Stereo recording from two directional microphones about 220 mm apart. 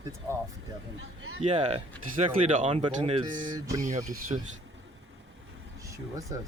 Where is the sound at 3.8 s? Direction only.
35° right (ahead or behind).